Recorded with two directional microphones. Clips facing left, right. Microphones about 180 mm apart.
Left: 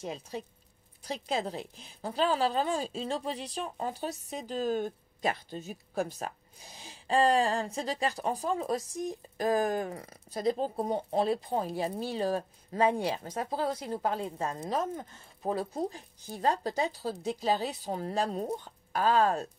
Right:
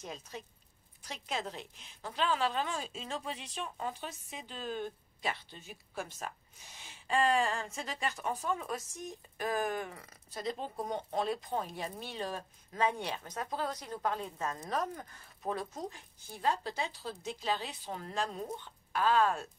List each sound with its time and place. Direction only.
0.0 s a woman's voice: 35° left (ahead or behind)